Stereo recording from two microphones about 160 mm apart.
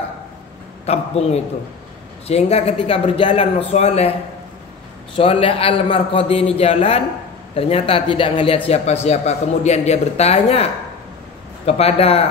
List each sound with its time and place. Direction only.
0.8 s a man's voice: 40° left (ahead or behind)
5.1 s a man's voice: 35° left (ahead or behind)